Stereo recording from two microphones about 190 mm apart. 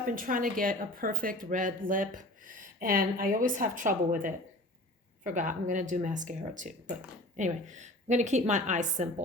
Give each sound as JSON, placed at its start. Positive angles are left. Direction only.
{"t": 0.0, "sound": "a woman's voice", "side_deg": -45}